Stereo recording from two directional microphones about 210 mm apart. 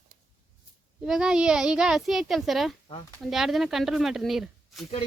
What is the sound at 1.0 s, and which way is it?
Speech, centre (ahead or behind).